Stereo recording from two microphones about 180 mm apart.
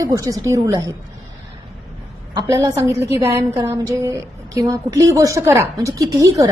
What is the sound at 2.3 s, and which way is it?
A woman's voice, 15° right (ahead or behind).